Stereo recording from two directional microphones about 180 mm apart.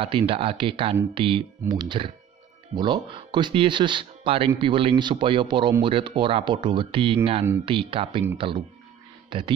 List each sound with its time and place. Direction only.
0.0 s speech: 30° right (ahead or behind)